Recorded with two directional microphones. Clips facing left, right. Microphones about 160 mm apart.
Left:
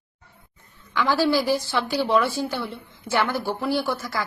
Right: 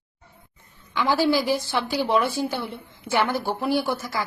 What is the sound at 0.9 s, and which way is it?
A woman's voice, 15° right (ahead or behind).